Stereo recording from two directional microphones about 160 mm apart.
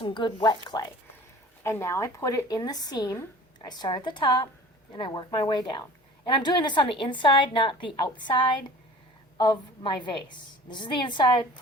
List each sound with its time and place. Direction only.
0.0 s a woman's voice: 30° left (ahead or behind)
1.6 s a woman's voice: 15° left (ahead or behind)